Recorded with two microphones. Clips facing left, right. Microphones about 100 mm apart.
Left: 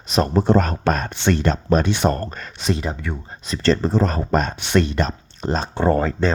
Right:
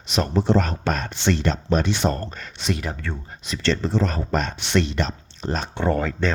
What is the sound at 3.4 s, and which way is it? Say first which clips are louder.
Speech: left 5 dB; 40° left (ahead or behind).